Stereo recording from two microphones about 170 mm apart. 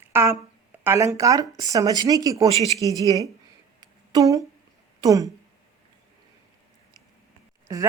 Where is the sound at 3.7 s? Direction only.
20° right (ahead or behind).